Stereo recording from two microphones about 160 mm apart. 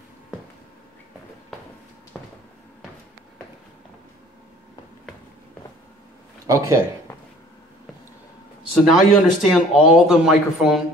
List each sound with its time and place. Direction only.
2.1 s a sound: 10° left (ahead or behind)
6.4 s speech: 20° right (ahead or behind)
8.8 s a man's voice: centre (ahead or behind)